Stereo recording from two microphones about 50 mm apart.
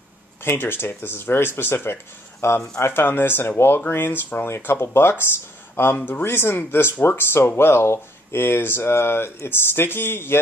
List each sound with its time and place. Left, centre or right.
0.4 s speech: left
2.4 s speech: left
2.8 s speech: left